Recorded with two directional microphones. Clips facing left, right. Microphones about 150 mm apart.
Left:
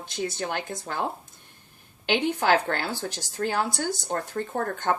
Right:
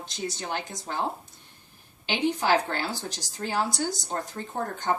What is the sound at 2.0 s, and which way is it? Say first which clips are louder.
Speech: left 2 dB; 55° left (ahead or behind).